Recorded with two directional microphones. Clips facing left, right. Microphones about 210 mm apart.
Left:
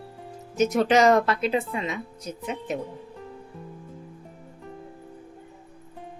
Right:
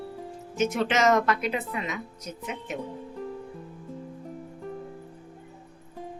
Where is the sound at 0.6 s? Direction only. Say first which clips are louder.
Left 5 dB; 40° left (ahead or behind).